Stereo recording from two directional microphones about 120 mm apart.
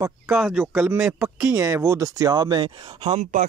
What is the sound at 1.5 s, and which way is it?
Speech, 25° right (ahead or behind).